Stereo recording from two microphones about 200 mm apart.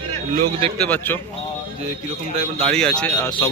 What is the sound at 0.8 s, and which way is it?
Speech, 10° left (ahead or behind).